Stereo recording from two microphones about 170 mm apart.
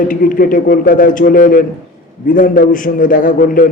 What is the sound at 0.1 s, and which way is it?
A man's voice, 55° left (ahead or behind).